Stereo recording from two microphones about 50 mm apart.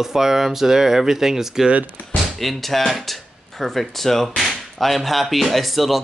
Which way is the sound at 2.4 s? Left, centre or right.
Centre.